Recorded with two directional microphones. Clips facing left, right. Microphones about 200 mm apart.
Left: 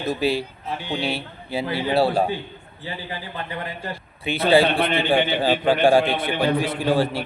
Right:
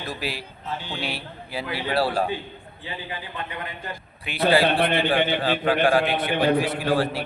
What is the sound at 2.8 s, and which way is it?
A man's voice, 35° left (ahead or behind).